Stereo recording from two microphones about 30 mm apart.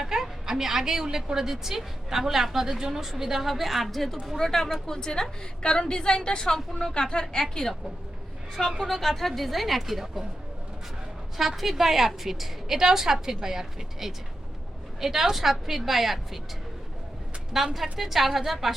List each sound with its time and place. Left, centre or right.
0.0 s a sound: centre
1.1 s a woman's voice: centre
3.4 s a woman's voice: centre
4.4 s a woman's voice: centre
8.8 s a woman's voice: centre
11.3 s a woman's voice: centre
17.5 s a woman's voice: centre